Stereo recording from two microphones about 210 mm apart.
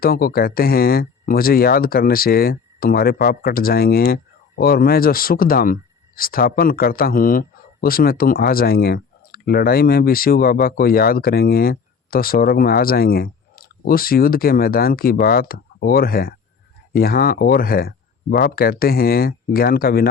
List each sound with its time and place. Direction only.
0.0 s speech: 45° left (ahead or behind)